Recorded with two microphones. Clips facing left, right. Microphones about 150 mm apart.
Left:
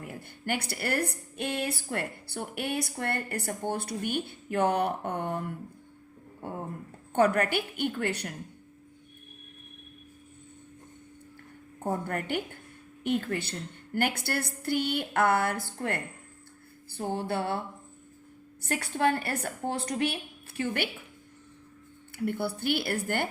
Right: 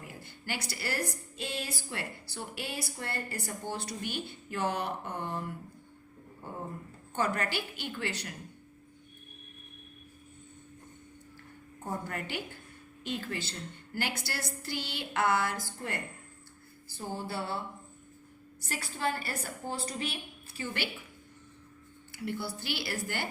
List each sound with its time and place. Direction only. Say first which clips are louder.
0.0 s a woman's voice: left 7 dB; 55° left (ahead or behind)
7.1 s a woman's voice: left 7 dB; 55° left (ahead or behind)
11.8 s a woman's voice: left 6 dB; 55° left (ahead or behind)
18.6 s a woman's voice: left 7 dB; 60° left (ahead or behind)
22.1 s a woman's voice: left 6 dB; 55° left (ahead or behind)